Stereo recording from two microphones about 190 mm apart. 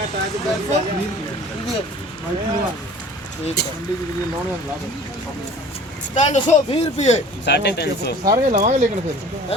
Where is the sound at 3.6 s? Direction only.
60° left (ahead or behind).